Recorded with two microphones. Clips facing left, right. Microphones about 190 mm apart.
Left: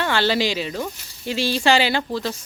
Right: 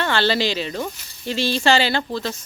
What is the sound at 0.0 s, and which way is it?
Speech, 10° left (ahead or behind).